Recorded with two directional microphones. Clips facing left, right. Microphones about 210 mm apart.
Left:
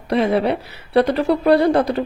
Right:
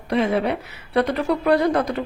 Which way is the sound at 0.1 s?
35° left (ahead or behind).